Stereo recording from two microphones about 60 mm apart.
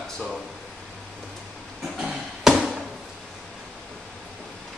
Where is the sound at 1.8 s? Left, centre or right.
Centre.